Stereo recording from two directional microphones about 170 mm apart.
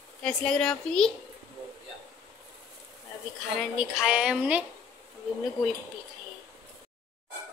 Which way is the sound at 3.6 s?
5° right (ahead or behind).